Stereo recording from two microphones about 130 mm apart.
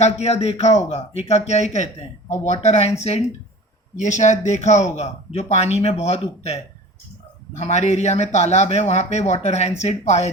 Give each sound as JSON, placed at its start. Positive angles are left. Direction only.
{"t": 0.0, "sound": "a man's voice", "side_deg": 55}
{"t": 3.9, "sound": "a man's voice", "side_deg": 70}